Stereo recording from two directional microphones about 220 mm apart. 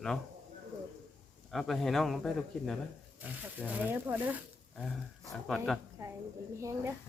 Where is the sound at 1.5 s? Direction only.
Centre (ahead or behind).